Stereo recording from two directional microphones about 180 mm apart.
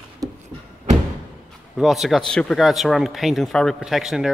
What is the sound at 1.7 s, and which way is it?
Speech, centre (ahead or behind).